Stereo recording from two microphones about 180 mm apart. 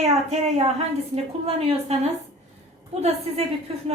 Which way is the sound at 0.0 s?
35° right (ahead or behind).